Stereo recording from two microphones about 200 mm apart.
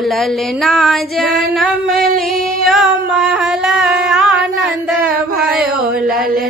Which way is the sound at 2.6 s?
Centre (ahead or behind).